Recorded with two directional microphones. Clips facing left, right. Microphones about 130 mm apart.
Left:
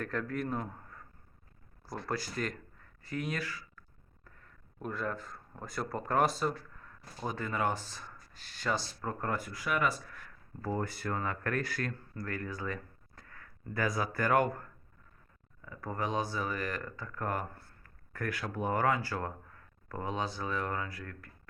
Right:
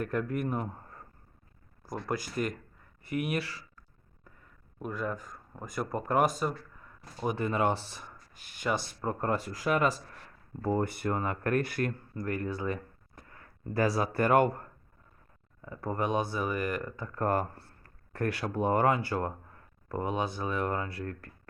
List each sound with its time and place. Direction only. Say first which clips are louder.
0.0 s speech: right 4 dB; 15° right (ahead or behind)
0.8 s a sound: right 2 dB; 35° right (ahead or behind)
1.9 s speech: right 3 dB; 15° right (ahead or behind)
4.2 s speech: right 1 dB; 10° right (ahead or behind)
6.4 s a sound: right 1 dB; 10° right (ahead or behind)
7.2 s speech: right 5 dB; 25° right (ahead or behind)
17.1 s speech: right 7 dB; 30° right (ahead or behind)